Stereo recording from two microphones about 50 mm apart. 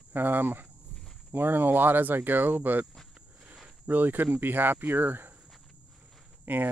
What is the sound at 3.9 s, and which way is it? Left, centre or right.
Speech, right.